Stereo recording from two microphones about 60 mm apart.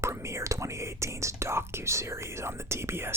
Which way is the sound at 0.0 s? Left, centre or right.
Right.